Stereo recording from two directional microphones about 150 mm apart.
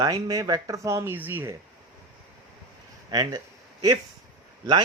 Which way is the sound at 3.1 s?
30° right (ahead or behind).